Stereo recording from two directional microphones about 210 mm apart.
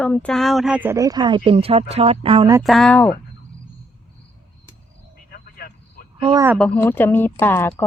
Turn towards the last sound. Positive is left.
turn(degrees=10)  # may be behind; listen again after turning